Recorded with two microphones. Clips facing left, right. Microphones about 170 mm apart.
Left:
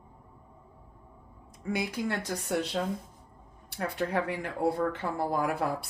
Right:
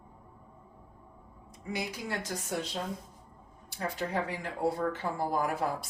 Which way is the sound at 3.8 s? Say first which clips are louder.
Left 3 dB; 60° left (ahead or behind).